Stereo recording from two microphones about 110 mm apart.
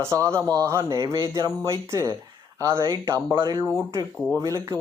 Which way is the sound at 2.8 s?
40° right (ahead or behind).